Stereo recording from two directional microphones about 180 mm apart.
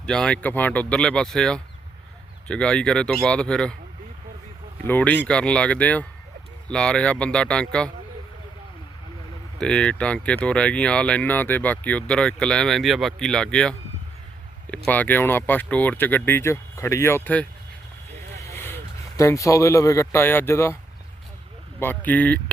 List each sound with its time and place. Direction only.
0.0 s speech: 5° left (ahead or behind)
4.9 s speech: 10° left (ahead or behind)
9.6 s speech: 5° left (ahead or behind)
14.8 s speech: 10° left (ahead or behind)
21.8 s speech: 10° left (ahead or behind)